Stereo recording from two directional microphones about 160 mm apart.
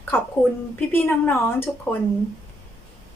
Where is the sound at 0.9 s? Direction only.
15° left (ahead or behind).